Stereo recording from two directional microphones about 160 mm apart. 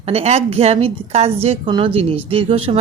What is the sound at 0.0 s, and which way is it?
Speech, 40° right (ahead or behind).